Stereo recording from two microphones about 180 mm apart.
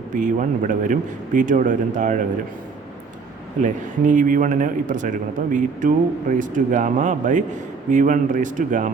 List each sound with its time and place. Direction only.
0.1 s a man's voice: 45° right (ahead or behind)
3.6 s a man's voice: 45° right (ahead or behind)